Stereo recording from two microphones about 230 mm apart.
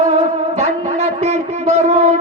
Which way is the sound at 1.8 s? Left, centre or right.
Right.